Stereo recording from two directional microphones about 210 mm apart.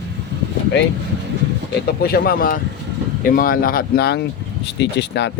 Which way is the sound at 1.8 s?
45° left (ahead or behind).